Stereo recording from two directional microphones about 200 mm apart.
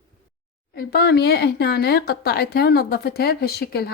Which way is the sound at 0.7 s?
50° left (ahead or behind).